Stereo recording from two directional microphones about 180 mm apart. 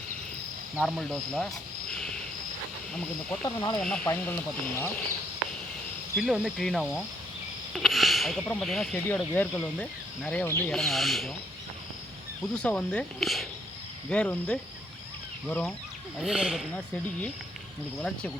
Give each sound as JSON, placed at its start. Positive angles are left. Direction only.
{"t": 0.8, "sound": "speech", "side_deg": 0}
{"t": 3.4, "sound": "speech", "side_deg": 20}
{"t": 3.8, "sound": "speech", "side_deg": 5}
{"t": 6.1, "sound": "speech", "side_deg": -5}
{"t": 12.5, "sound": "speech", "side_deg": 5}
{"t": 16.1, "sound": "speech", "side_deg": -5}
{"t": 16.7, "sound": "speech", "side_deg": 5}